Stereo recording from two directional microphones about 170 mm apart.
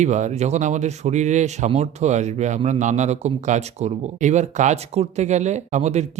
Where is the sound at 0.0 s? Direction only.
45° right (ahead or behind).